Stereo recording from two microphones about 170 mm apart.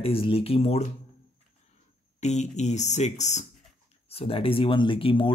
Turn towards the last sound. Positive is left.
turn(degrees=30)  # may be behind; listen again after turning